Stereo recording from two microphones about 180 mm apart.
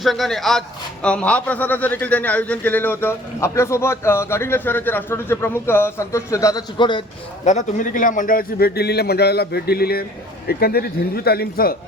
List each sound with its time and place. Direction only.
0.0 s a man's voice: centre (ahead or behind); by 7.0 s 25° left (ahead or behind)
7.4 s a man's voice: 45° left (ahead or behind)